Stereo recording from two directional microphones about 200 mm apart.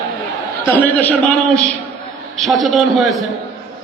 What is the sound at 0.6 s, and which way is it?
Speech, 10° left (ahead or behind).